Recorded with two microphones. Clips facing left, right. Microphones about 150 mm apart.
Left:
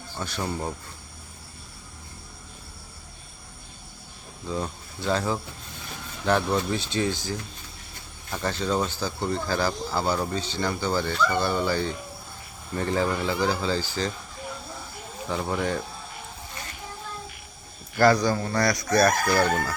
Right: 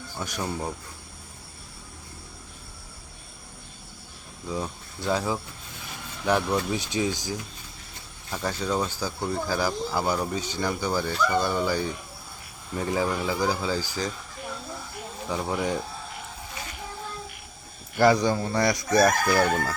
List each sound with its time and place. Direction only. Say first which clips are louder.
0.2 s speech: even; 15° right (ahead or behind)
4.4 s speech: left 1 dB; 5° right (ahead or behind)
15.4 s speech: even; 10° right (ahead or behind)
17.9 s speech: even; 15° right (ahead or behind)